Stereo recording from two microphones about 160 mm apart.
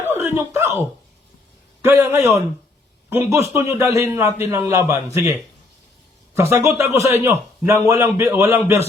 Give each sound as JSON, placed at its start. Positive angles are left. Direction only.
{"t": 0.0, "sound": "a sound", "side_deg": -15}
{"t": 1.8, "sound": "a man's voice", "side_deg": -15}
{"t": 6.3, "sound": "a man's voice", "side_deg": -15}